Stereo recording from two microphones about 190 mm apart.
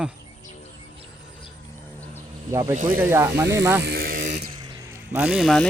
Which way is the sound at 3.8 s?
55° right (ahead or behind).